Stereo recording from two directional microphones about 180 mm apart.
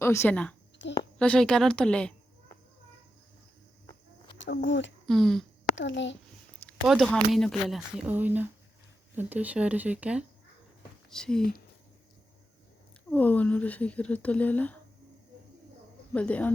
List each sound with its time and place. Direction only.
0.0 s speech: 15° left (ahead or behind)
0.8 s a sound: 80° left
1.2 s speech: 5° left (ahead or behind)
4.4 s speech: 80° left
5.0 s speech: centre (ahead or behind)
5.7 s a child's voice: 90° left
6.7 s speech: centre (ahead or behind)
13.1 s speech: 10° left (ahead or behind)
16.1 s speech: 10° left (ahead or behind)